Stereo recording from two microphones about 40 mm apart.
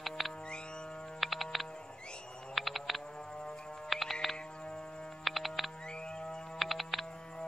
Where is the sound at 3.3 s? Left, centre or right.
Left.